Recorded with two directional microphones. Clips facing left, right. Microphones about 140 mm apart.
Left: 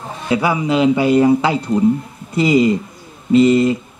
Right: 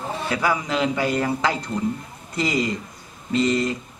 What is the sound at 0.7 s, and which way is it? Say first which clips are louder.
Speech: left 9 dB; 25° left (ahead or behind).